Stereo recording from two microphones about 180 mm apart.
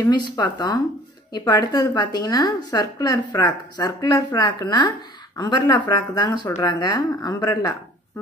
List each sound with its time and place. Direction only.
0.0 s a woman's voice: 25° left (ahead or behind)